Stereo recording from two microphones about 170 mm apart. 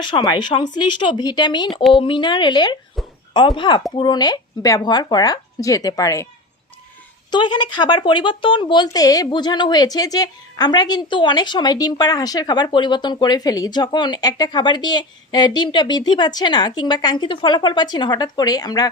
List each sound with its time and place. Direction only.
0.0 s speech: 25° left (ahead or behind)
7.3 s speech: 25° left (ahead or behind)